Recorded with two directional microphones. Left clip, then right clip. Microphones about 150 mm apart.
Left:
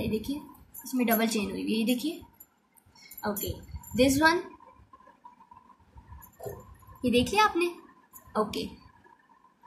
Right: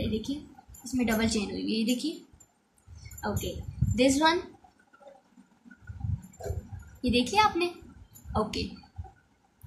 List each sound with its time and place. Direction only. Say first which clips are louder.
0.0 s a woman's voice: left 1 dB; centre (ahead or behind)
3.2 s speech: even; 10° left (ahead or behind)
7.0 s a child's voice: even; centre (ahead or behind)